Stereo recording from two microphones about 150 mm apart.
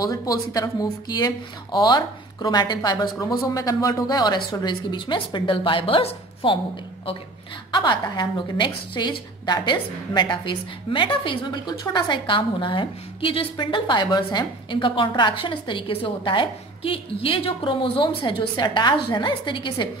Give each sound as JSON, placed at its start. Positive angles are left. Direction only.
{"t": 0.0, "sound": "speech", "side_deg": 25}
{"t": 7.7, "sound": "a woman's voice", "side_deg": 30}